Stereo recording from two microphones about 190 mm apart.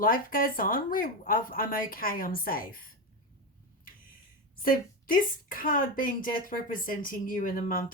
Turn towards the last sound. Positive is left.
turn(degrees=45)  # may be behind; listen again after turning